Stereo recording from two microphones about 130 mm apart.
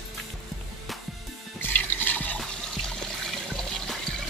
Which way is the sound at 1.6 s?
15° left (ahead or behind).